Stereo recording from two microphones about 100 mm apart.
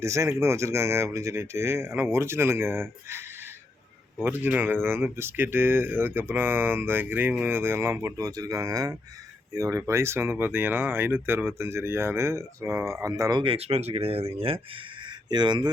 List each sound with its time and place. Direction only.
0.0 s speech: 30° right (ahead or behind)
13.3 s speech: 60° right (ahead or behind)